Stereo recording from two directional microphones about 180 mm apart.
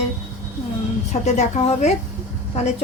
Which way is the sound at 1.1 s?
40° left (ahead or behind).